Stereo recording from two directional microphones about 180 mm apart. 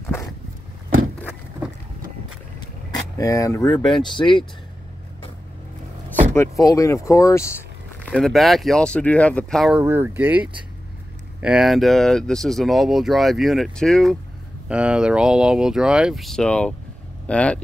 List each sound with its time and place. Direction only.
0.0 s vehicle: 15° left (ahead or behind)
3.2 s speech: 20° left (ahead or behind)
3.6 s speech: 5° left (ahead or behind)
4.2 s speech: 25° left (ahead or behind)
6.3 s speech: 15° left (ahead or behind)
8.0 s speech: 5° left (ahead or behind)
9.8 s speech: 10° right (ahead or behind); by 17.6 s 5° left (ahead or behind)